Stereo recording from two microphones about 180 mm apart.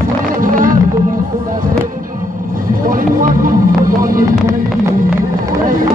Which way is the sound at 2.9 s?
50° right (ahead or behind).